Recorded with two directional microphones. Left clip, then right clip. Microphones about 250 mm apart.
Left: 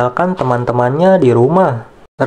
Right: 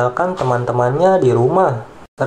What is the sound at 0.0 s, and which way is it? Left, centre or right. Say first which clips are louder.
Speech: left 2 dB; left.